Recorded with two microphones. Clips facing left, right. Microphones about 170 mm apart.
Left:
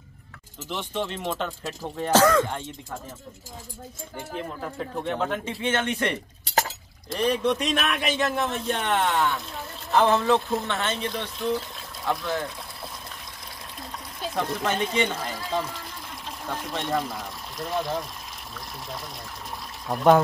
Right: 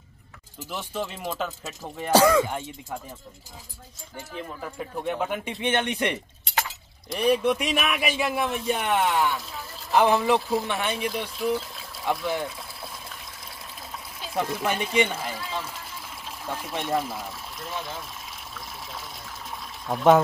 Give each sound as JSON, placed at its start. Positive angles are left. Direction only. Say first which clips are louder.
{"t": 0.7, "sound": "speech", "louder": "left 2 dB", "side_deg": -5}
{"t": 4.7, "sound": "speech", "louder": "even", "side_deg": -10}
{"t": 6.4, "sound": "chink", "louder": "left 5 dB", "side_deg": 40}
{"t": 7.1, "sound": "speech", "louder": "right 1 dB", "side_deg": -10}
{"t": 9.9, "sound": "speech", "louder": "even", "side_deg": -15}
{"t": 14.2, "sound": "speech", "louder": "even", "side_deg": -5}
{"t": 19.9, "sound": "speech", "louder": "even", "side_deg": 0}